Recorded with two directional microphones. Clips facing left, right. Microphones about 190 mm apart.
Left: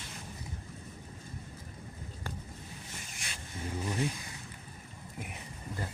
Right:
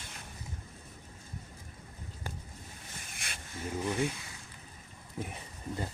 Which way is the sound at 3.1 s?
55° right (ahead or behind).